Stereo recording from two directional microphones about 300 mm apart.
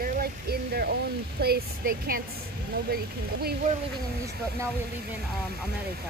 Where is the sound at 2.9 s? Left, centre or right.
Right.